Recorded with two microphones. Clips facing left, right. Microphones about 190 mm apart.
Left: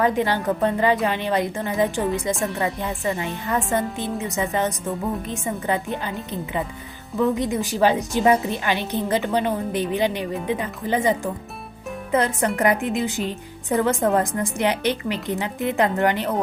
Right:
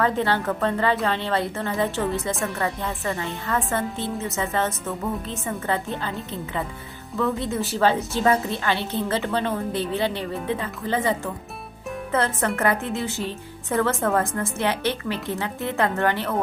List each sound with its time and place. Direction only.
0.0 s a woman's voice: 15° left (ahead or behind)
12.1 s a woman's voice: 15° left (ahead or behind)